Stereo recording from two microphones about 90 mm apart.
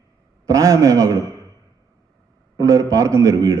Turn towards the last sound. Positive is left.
turn(degrees=-35)  # may be behind; listen again after turning